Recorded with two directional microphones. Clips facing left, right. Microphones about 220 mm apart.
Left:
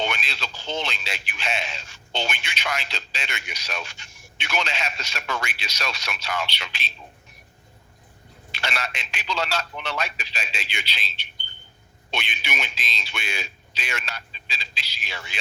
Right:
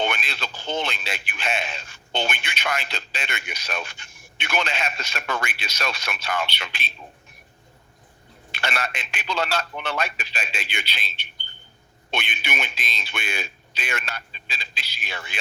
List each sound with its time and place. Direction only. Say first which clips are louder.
0.0 s speech: right 2 dB; 55° right (ahead or behind)
8.5 s speech: right 2 dB; 55° right (ahead or behind)